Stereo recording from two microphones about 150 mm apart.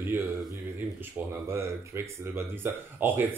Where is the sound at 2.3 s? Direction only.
15° right (ahead or behind).